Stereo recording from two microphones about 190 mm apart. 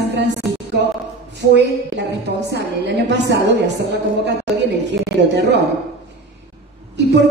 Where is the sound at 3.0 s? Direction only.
65° right (ahead or behind).